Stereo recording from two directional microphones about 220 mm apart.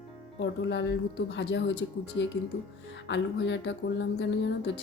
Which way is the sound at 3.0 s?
55° left (ahead or behind).